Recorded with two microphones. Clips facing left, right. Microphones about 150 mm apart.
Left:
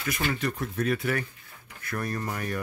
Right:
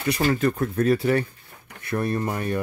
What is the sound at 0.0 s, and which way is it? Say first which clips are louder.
Speech: right 7 dB; 35° right (ahead or behind).